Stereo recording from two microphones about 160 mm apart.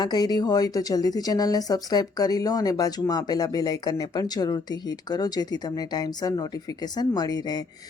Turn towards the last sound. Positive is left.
turn(degrees=25)  # may be behind; listen again after turning